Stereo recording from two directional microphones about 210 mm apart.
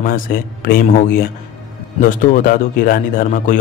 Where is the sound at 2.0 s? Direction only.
40° left (ahead or behind).